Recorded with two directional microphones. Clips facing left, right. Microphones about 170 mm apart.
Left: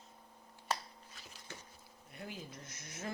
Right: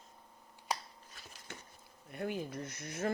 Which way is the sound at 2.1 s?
55° right (ahead or behind).